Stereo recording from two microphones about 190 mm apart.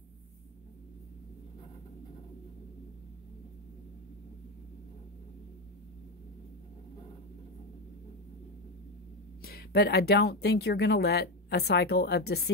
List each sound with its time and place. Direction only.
9.4 s speech: 55° left (ahead or behind)